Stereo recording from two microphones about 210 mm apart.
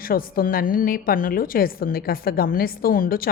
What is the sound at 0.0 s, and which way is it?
Speech, 45° left (ahead or behind).